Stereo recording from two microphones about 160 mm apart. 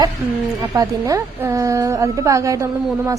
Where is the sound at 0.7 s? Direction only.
20° right (ahead or behind).